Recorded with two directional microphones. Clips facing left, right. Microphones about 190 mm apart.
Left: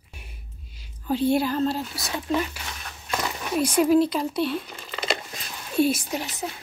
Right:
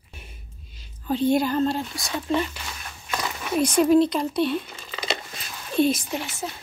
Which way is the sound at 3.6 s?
5° left (ahead or behind).